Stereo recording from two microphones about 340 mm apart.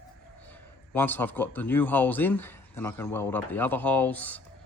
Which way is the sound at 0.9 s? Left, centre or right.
Centre.